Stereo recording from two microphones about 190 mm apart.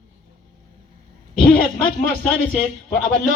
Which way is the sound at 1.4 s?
50° left (ahead or behind).